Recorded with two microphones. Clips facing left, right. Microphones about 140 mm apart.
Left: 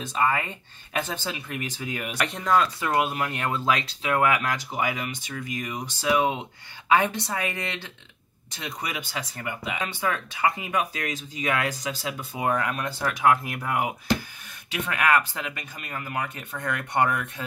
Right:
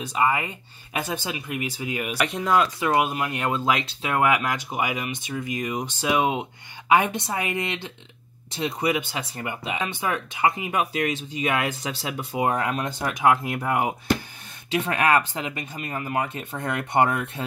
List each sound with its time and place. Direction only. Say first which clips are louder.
0.1 s speech: right 2 dB; 15° right (ahead or behind)